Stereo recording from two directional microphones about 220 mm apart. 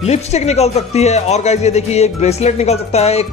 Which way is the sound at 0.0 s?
30° left (ahead or behind).